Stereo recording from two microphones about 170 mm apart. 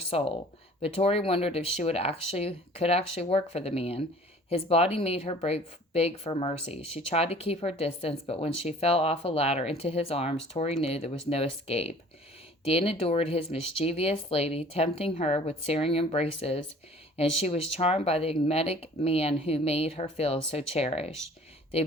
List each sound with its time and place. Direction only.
0.0 s speech: 35° left (ahead or behind)